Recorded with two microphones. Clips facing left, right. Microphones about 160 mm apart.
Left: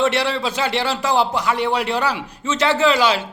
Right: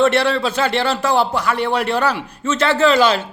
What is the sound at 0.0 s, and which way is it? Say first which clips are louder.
A man's voice: right 4 dB; 15° left (ahead or behind).